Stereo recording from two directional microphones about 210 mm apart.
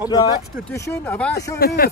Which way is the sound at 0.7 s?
10° left (ahead or behind).